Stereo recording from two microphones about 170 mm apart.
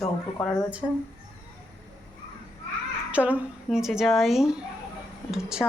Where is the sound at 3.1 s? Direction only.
10° right (ahead or behind).